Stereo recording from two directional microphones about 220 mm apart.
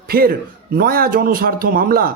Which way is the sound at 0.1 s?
45° right (ahead or behind).